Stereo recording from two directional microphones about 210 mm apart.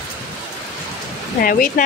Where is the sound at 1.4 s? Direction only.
40° left (ahead or behind).